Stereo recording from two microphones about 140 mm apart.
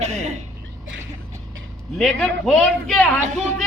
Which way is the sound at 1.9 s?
Centre (ahead or behind).